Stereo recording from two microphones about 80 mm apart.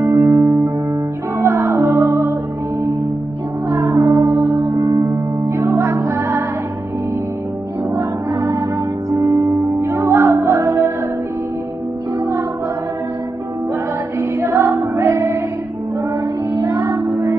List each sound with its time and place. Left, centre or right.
0.1 s music: right
1.4 s music: right
3.7 s music: right
7.9 s music: right
9.2 s music: right
9.7 s music: right
12.2 s music: right
14.4 s music: right
16.5 s music: right